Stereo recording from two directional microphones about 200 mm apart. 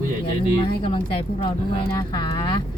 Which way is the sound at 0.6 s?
25° left (ahead or behind).